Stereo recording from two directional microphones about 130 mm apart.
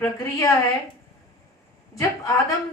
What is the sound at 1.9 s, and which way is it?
Speech, 25° left (ahead or behind).